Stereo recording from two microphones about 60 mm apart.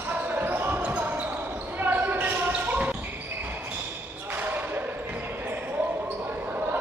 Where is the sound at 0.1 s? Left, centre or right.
Right.